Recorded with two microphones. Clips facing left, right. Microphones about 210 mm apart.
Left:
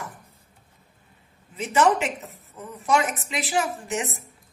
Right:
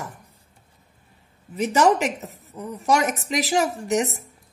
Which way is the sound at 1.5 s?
40° right (ahead or behind).